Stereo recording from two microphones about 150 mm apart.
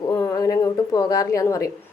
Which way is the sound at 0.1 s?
25° left (ahead or behind).